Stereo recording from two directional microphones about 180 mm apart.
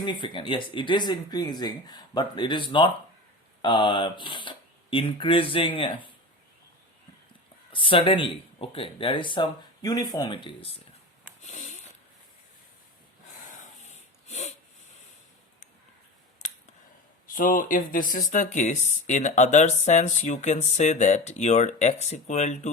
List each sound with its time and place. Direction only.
0.0 s speech: 25° left (ahead or behind)
7.7 s speech: 30° left (ahead or behind)
11.4 s sniff: 40° left (ahead or behind)
14.3 s a sound: 40° left (ahead or behind)
16.4 s a sound: 40° left (ahead or behind)
17.3 s speech: 50° left (ahead or behind)